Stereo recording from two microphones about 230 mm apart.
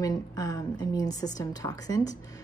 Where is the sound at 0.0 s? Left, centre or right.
Centre.